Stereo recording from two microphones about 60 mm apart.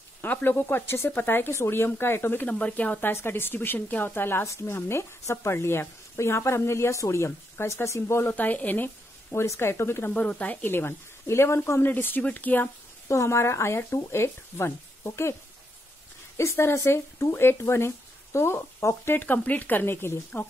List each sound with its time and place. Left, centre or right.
0.2 s speech: left
2.4 s speech: left
3.0 s speech: left
4.5 s speech: left
8.3 s speech: left
9.3 s speech: left
10.1 s speech: left
10.7 s speech: left
11.9 s speech: left
13.1 s speech: left
16.3 s speech: left
19.1 s speech: left